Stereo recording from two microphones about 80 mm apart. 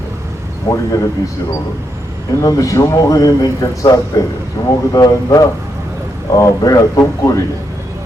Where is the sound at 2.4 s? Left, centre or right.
Left.